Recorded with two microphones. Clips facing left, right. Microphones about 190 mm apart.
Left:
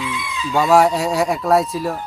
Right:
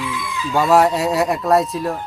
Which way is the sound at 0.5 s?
Centre (ahead or behind).